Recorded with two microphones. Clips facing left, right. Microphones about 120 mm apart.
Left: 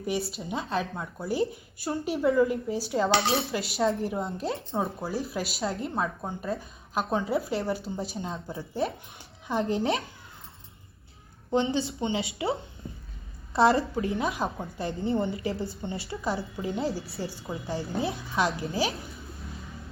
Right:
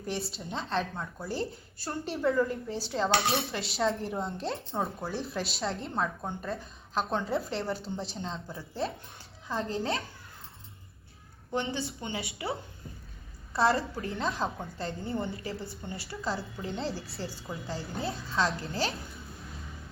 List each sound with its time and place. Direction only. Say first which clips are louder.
0.0 s a woman's voice: left 5 dB; 5° left (ahead or behind); by 10.0 s 20° left (ahead or behind)
11.5 s a woman's voice: left 6 dB; 25° left (ahead or behind)
13.5 s a woman's voice: left 4 dB; 25° left (ahead or behind)
16.6 s speech: left 5 dB; 5° left (ahead or behind)
17.4 s a woman's voice: left 4 dB; 25° left (ahead or behind)
18.6 s speech: left 4 dB; 5° left (ahead or behind)